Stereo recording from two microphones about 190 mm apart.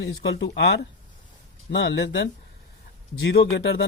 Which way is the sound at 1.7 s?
70° left (ahead or behind).